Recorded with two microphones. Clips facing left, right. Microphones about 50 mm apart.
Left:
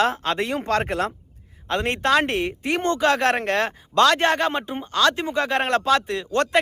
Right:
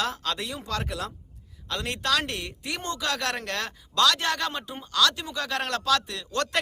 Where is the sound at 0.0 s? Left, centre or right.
Left.